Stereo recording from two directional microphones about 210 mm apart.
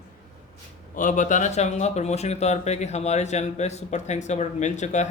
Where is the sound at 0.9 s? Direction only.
40° left (ahead or behind).